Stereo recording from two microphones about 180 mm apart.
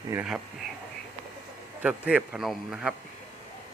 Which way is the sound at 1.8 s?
10° right (ahead or behind).